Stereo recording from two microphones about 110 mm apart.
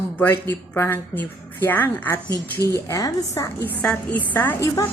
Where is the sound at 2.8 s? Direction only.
30° left (ahead or behind).